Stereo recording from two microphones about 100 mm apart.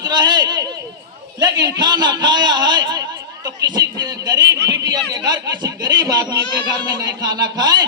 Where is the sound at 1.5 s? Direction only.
45° right (ahead or behind).